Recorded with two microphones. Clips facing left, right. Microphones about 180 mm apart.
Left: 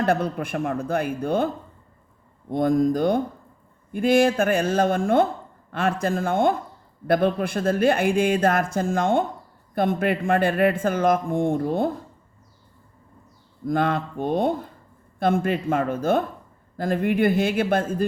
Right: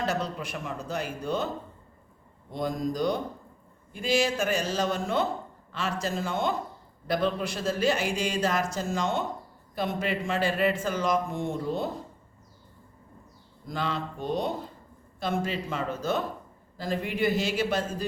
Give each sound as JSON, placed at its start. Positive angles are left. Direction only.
{"t": 0.0, "sound": "a man's voice", "side_deg": 55}
{"t": 2.5, "sound": "a man's voice", "side_deg": 55}
{"t": 13.7, "sound": "a man's voice", "side_deg": 55}